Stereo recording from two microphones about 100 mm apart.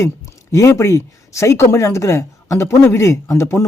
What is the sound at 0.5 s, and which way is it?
Speech, 30° left (ahead or behind).